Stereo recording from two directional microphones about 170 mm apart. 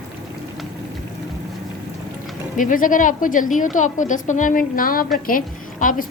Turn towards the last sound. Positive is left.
turn(degrees=50)  # may be behind; listen again after turning